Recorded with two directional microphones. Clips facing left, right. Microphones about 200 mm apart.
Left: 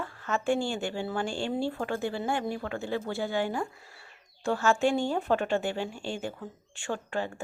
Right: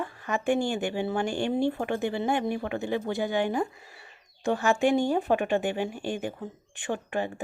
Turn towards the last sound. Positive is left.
turn(degrees=-15)  # may be behind; listen again after turning